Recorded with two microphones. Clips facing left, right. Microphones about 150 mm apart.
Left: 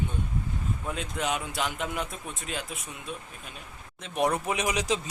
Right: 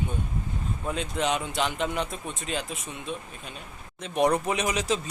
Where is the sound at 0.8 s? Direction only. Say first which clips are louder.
Right 4 dB; centre (ahead or behind).